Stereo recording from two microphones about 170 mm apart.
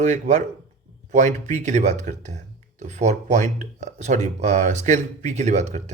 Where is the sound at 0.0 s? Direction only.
45° right (ahead or behind).